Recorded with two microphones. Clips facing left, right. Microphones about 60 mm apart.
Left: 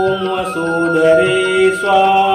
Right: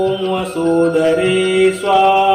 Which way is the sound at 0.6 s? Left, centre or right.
Left.